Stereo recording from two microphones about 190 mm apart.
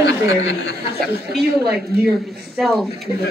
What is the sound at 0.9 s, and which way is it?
Speech, 55° right (ahead or behind).